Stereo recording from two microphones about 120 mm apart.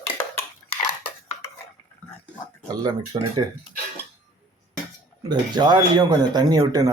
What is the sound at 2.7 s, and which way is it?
Speech, 35° right (ahead or behind).